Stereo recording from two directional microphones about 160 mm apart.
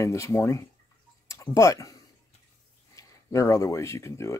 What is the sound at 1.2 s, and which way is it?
Tick-tock, 20° left (ahead or behind).